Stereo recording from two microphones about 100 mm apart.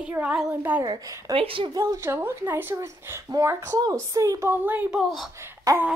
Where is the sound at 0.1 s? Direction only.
10° right (ahead or behind).